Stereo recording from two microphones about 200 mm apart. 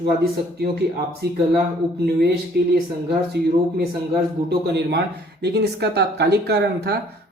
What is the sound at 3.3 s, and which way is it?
Speech, 55° right (ahead or behind).